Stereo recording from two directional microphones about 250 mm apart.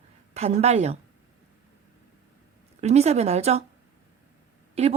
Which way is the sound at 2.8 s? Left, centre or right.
Right.